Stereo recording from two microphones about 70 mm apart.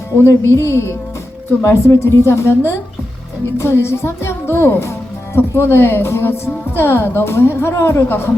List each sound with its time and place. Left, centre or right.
0.2 s a woman's voice: left